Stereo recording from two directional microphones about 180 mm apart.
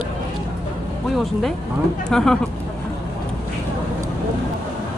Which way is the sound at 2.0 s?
5° left (ahead or behind).